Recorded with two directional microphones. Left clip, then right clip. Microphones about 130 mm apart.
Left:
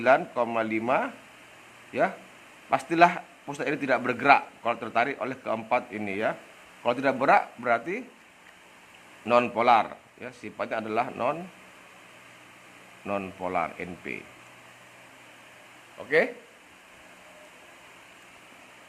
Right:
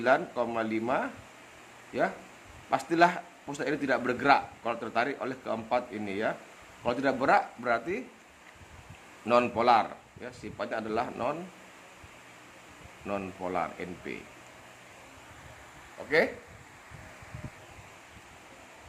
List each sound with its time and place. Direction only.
0.0 s speech: 35° left (ahead or behind)
9.2 s speech: 25° left (ahead or behind)
13.1 s speech: 35° left (ahead or behind)
16.0 s speech: 25° left (ahead or behind)